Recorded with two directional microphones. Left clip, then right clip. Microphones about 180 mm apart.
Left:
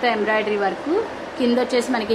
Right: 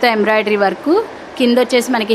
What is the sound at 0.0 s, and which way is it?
Speech, 60° right (ahead or behind).